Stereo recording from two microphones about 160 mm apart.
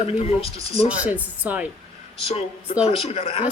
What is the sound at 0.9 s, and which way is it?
Speech, 10° right (ahead or behind).